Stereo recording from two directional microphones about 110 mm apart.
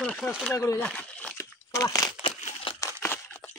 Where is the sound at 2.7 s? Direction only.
50° left (ahead or behind).